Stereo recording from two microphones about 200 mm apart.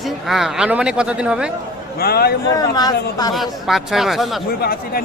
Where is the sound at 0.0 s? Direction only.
Centre (ahead or behind).